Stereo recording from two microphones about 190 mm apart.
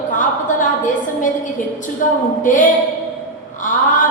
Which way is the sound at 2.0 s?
45° left (ahead or behind).